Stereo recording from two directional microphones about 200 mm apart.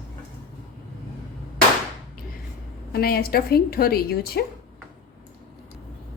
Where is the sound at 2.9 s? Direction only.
50° left (ahead or behind).